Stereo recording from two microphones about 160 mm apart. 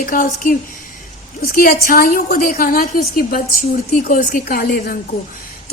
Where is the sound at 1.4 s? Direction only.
65° left (ahead or behind).